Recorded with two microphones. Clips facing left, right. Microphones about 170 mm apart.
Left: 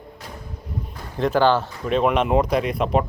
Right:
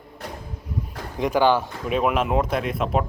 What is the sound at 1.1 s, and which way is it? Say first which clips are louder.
Speech: left 1 dB; 15° right (ahead or behind).